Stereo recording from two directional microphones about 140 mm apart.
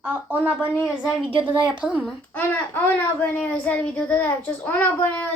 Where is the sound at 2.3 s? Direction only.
10° left (ahead or behind).